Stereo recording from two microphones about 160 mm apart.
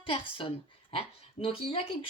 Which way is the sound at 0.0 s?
35° left (ahead or behind).